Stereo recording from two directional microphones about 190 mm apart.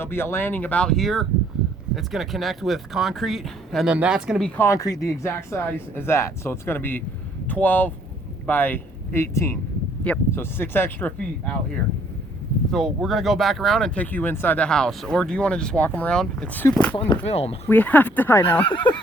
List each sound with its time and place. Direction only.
0.0 s speech: 10° left (ahead or behind)
17.2 s speech: 30° left (ahead or behind)
17.7 s speech: 10° left (ahead or behind)
18.6 s speech: 25° left (ahead or behind)